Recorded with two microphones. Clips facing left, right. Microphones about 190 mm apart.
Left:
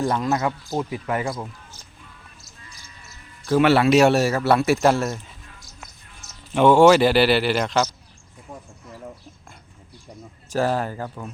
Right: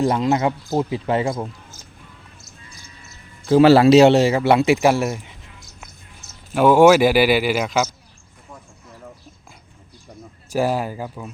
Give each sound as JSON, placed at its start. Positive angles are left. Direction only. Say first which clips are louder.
{"t": 0.0, "sound": "speech", "louder": "right 4 dB", "side_deg": -20}
{"t": 3.4, "sound": "a man's voice", "louder": "right 5 dB", "side_deg": -25}
{"t": 3.7, "sound": "speech", "louder": "right 6 dB", "side_deg": -35}
{"t": 4.0, "sound": "speech", "louder": "right 4 dB", "side_deg": -20}
{"t": 6.5, "sound": "speech", "louder": "right 1 dB", "side_deg": -5}
{"t": 10.5, "sound": "speech", "louder": "right 2 dB", "side_deg": -10}